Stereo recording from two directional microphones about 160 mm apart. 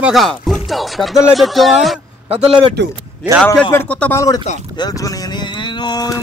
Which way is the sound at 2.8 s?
90° right.